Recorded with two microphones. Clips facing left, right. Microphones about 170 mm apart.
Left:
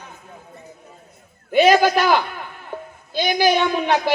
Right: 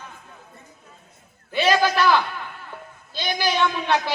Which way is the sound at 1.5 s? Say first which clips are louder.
Left 6 dB; 50° left (ahead or behind).